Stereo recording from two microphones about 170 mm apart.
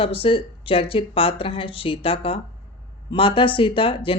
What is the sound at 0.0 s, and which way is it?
Speech, 35° left (ahead or behind).